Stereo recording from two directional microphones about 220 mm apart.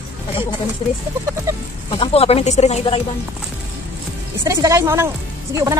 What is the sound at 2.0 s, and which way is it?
Speech, 25° left (ahead or behind).